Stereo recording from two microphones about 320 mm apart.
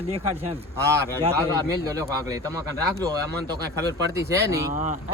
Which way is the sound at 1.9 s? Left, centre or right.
Centre.